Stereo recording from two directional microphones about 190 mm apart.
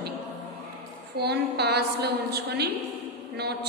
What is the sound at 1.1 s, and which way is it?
A woman's voice, 60° right (ahead or behind).